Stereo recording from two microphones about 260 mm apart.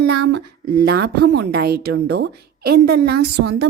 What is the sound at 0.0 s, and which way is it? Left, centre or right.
A woman's voice, right.